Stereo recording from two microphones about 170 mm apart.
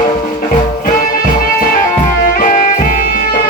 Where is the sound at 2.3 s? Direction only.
50° left (ahead or behind).